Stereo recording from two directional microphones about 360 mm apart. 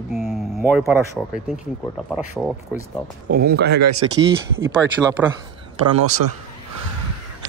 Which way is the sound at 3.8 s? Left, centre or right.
Right.